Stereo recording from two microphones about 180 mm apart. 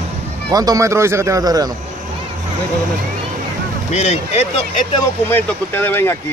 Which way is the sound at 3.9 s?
35° left (ahead or behind).